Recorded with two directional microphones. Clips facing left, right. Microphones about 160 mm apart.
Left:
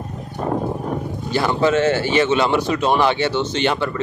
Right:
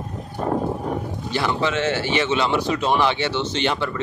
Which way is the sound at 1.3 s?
45° left (ahead or behind).